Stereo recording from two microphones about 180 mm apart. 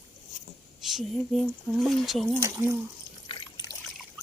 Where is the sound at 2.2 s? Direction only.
10° right (ahead or behind).